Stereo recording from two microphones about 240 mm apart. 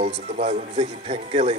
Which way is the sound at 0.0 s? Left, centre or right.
Right.